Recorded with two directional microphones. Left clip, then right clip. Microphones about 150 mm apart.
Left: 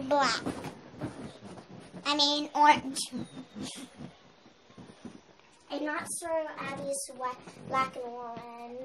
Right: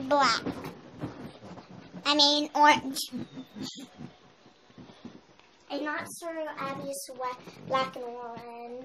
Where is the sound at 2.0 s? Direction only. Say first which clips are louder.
Right 4 dB; 25° right (ahead or behind).